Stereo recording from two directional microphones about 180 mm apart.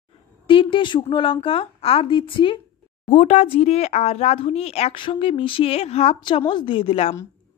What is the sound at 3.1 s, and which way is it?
Speech, 40° left (ahead or behind).